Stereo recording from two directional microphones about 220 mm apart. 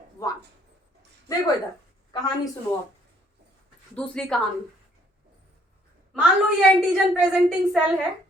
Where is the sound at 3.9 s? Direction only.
5° left (ahead or behind).